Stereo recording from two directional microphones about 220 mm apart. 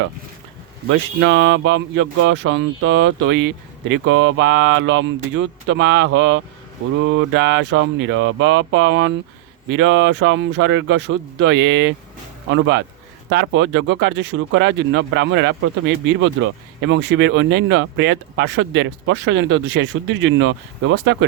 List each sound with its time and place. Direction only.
1.2 s speech: 60° right (ahead or behind)